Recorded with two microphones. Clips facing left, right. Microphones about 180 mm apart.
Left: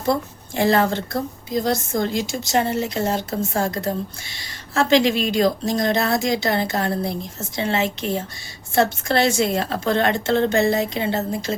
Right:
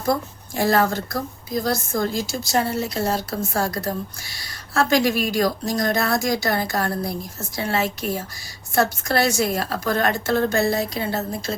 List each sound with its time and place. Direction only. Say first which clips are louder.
1.1 s a woman's voice: left 2 dB; 25° left (ahead or behind)